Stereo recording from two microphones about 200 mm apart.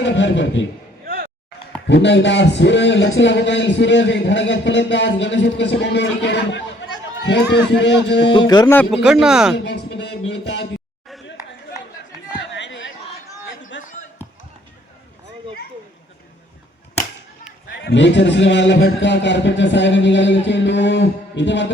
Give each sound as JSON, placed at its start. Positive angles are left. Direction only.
{"t": 0.0, "sound": "a sound", "side_deg": 65}
{"t": 1.0, "sound": "a sound", "side_deg": -50}
{"t": 1.9, "sound": "a man's voice", "side_deg": 60}
{"t": 8.3, "sound": "speech", "side_deg": 20}
{"t": 8.7, "sound": "speech", "side_deg": 5}
{"t": 9.0, "sound": "speech", "side_deg": -5}
{"t": 9.6, "sound": "a man's voice", "side_deg": 55}
{"t": 12.4, "sound": "a sound", "side_deg": 65}
{"t": 17.7, "sound": "a man's voice", "side_deg": 60}